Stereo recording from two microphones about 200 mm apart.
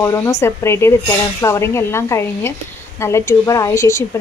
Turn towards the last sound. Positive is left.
turn(degrees=15)  # may be behind; listen again after turning